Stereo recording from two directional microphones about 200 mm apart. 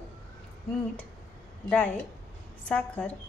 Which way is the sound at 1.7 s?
5° left (ahead or behind).